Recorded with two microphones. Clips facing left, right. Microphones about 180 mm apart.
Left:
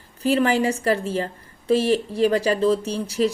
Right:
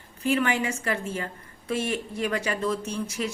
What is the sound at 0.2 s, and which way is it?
A woman's voice, 35° left (ahead or behind).